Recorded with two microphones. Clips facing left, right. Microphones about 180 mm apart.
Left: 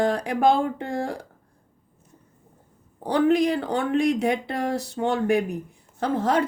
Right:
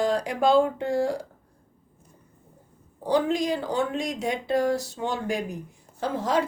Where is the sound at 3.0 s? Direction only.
60° left (ahead or behind).